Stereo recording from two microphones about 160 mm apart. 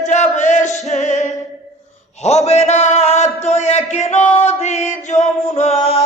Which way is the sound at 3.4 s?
45° left (ahead or behind).